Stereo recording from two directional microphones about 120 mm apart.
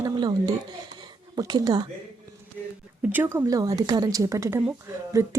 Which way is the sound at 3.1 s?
20° right (ahead or behind).